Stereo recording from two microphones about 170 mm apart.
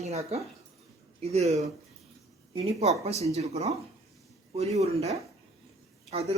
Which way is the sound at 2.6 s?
35° right (ahead or behind).